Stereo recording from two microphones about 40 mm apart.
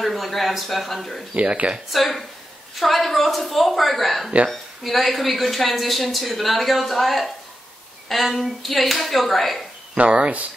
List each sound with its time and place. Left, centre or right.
0.0 s speech: centre
1.3 s speech: right
1.9 s speech: centre
9.9 s speech: right